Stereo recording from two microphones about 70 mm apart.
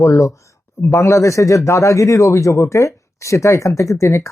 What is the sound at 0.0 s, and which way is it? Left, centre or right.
Speech, left.